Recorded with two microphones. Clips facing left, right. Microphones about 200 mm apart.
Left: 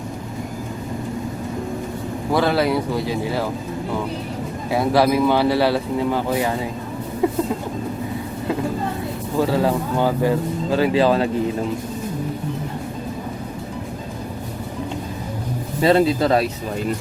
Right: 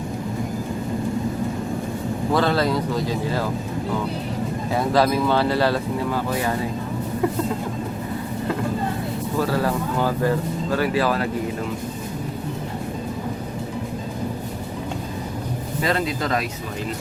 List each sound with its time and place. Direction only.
2.3 s speech: 10° left (ahead or behind)
4.7 s speech: 10° left (ahead or behind)
9.4 s speech: 15° left (ahead or behind)
15.8 s speech: 30° left (ahead or behind)